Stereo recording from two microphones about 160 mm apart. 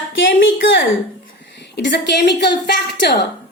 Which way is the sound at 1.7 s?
90° left.